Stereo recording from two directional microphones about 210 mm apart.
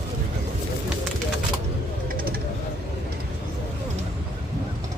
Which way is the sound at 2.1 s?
45° right (ahead or behind).